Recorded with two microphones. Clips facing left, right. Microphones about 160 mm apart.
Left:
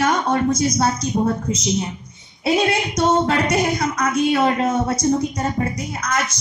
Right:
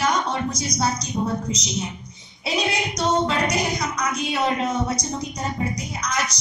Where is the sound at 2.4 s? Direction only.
55° left (ahead or behind).